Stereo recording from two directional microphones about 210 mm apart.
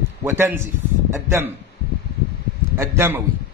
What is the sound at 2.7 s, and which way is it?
Speech, 10° right (ahead or behind).